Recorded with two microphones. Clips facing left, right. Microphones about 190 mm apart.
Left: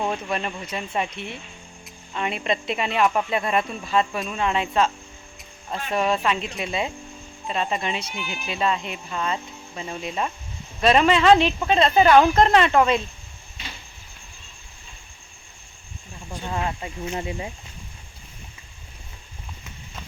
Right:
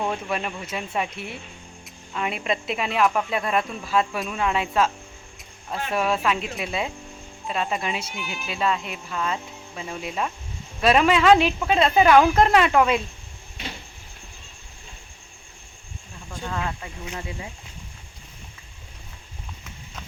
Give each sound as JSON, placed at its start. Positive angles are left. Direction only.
{"t": 0.3, "sound": "speech", "side_deg": -5}
{"t": 16.3, "sound": "speech", "side_deg": 20}